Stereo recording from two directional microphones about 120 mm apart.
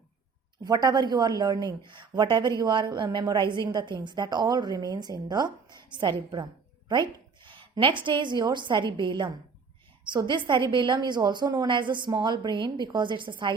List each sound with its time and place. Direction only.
0.6 s a woman's voice: 35° right (ahead or behind)